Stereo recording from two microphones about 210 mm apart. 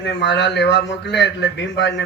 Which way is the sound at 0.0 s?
55° left (ahead or behind).